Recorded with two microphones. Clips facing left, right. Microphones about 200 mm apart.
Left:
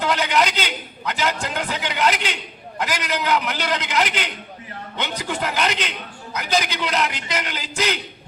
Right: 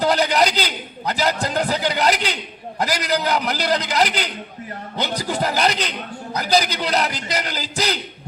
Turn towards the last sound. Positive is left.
turn(degrees=-35)  # may be behind; listen again after turning